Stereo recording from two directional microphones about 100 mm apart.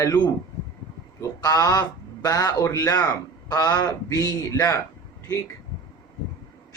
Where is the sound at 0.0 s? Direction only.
40° left (ahead or behind).